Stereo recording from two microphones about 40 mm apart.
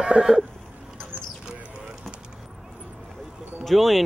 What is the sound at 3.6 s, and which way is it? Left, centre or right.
Speech, centre.